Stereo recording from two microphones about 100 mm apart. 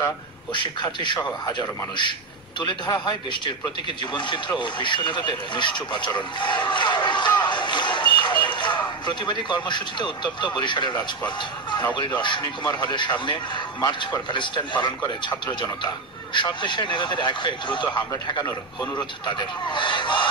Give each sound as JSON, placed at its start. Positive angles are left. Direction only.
{"t": 0.5, "sound": "a man's voice", "side_deg": 55}
{"t": 2.9, "sound": "a man's voice", "side_deg": 50}
{"t": 12.2, "sound": "a man's voice", "side_deg": 50}